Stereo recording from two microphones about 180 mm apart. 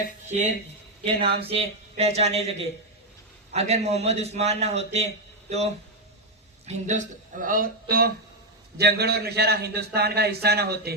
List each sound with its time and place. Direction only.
0.3 s speech: 45° right (ahead or behind)
1.4 s a man's voice: 30° right (ahead or behind); by 10.9 s 60° right (ahead or behind)